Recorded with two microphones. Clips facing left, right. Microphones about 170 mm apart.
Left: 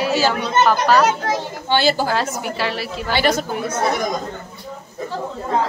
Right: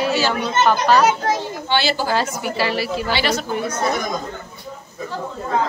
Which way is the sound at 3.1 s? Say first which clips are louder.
Left 6 dB; 50° left (ahead or behind).